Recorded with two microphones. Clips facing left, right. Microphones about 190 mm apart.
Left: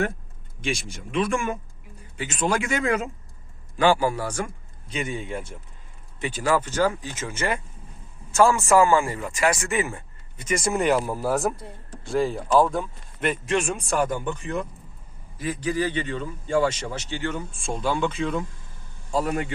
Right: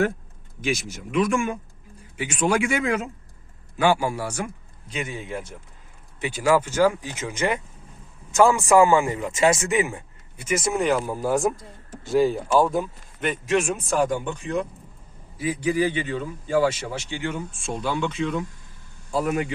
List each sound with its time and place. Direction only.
1.3 s a man's voice: centre (ahead or behind)
2.1 s a man's voice: 10° right (ahead or behind)
15.4 s speech: 10° right (ahead or behind)
17.5 s a man's voice: centre (ahead or behind)